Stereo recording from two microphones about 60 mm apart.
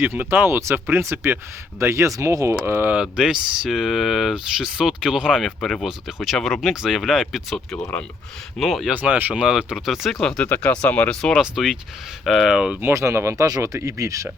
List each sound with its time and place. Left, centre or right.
0.0 s speech: right
2.5 s speech: right
2.9 s speech: centre
8.5 s speech: centre
8.9 s speech: right
9.3 s speech: centre
10.2 s speech: centre
10.4 s speech: left
11.3 s speech: centre
12.9 s speech: right
13.4 s speech: right